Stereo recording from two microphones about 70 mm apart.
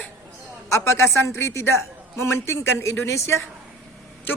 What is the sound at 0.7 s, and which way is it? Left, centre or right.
Speech, left.